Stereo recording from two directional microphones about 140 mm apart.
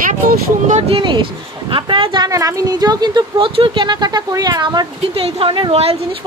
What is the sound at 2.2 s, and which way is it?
Speech, 25° right (ahead or behind).